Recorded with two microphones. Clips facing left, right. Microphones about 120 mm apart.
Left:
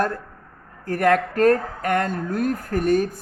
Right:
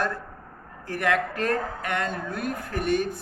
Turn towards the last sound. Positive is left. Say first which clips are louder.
# left 5 dB
turn(degrees=40)  # may be behind; listen again after turning